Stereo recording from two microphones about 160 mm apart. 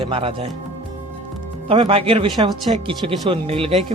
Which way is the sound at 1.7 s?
35° right (ahead or behind).